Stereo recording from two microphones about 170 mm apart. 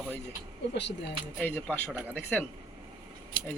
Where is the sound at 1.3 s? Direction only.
10° left (ahead or behind).